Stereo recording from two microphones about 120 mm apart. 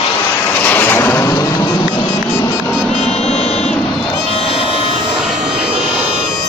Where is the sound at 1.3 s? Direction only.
30° left (ahead or behind).